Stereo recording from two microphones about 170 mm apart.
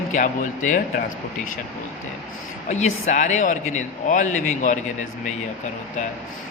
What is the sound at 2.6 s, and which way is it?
Speech, 45° left (ahead or behind).